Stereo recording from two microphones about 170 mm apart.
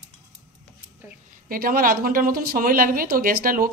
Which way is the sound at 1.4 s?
55° right (ahead or behind).